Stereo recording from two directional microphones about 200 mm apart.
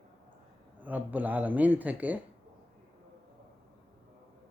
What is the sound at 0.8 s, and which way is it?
Speech, 10° right (ahead or behind).